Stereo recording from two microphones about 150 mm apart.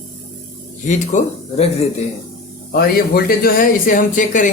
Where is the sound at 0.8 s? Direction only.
55° left (ahead or behind).